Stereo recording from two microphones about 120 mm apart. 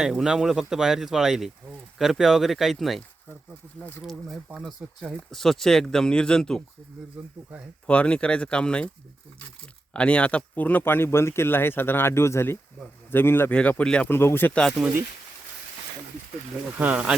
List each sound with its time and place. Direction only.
0.0 s speech: 5° right (ahead or behind)
4.0 s speech: centre (ahead or behind)
7.2 s speech: 10° right (ahead or behind)
7.9 s speech: 10° left (ahead or behind)
9.9 s a man's voice: 10° left (ahead or behind)
16.7 s speech: 10° right (ahead or behind)